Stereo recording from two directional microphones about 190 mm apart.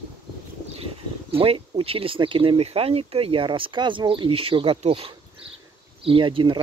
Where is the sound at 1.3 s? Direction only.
30° right (ahead or behind).